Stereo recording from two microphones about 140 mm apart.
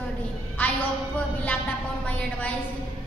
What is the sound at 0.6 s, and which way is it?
A woman's voice, 15° left (ahead or behind).